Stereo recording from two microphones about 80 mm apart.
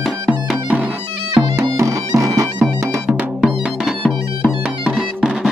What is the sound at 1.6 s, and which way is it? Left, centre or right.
Music, right.